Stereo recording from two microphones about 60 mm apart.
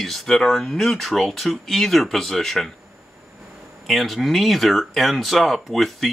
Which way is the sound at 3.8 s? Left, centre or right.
Centre.